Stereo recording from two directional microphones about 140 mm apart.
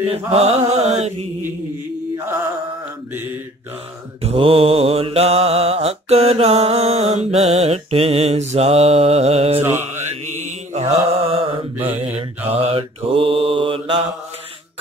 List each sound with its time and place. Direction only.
0.1 s mantra: 45° right (ahead or behind)
4.2 s mantra: 45° right (ahead or behind)
9.6 s mantra: 15° right (ahead or behind)
10.7 s mantra: 50° right (ahead or behind)